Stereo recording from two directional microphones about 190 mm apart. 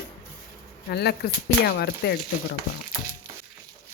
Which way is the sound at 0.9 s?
55° left (ahead or behind).